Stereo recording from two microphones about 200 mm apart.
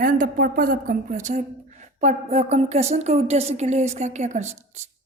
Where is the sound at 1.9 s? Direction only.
35° right (ahead or behind).